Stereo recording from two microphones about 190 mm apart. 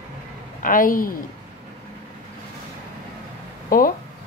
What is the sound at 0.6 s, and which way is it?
Speech, 45° left (ahead or behind).